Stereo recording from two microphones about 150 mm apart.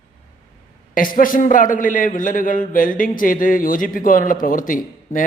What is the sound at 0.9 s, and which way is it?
A man's voice, 65° left (ahead or behind).